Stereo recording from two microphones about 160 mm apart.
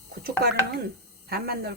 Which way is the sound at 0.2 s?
70° right (ahead or behind).